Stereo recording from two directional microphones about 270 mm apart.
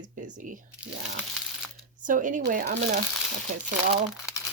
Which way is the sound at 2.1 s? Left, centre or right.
Right.